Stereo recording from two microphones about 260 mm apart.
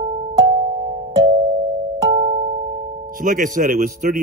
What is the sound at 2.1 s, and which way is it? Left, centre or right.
Music, centre.